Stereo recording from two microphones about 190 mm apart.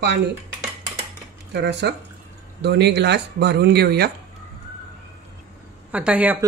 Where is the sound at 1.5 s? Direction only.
65° right (ahead or behind).